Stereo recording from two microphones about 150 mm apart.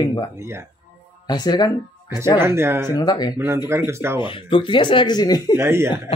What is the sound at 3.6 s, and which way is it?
Speech, 15° right (ahead or behind).